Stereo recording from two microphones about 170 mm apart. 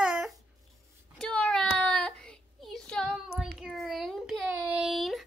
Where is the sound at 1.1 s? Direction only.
5° left (ahead or behind).